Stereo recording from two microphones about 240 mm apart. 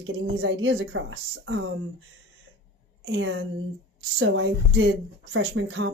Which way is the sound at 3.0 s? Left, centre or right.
Right.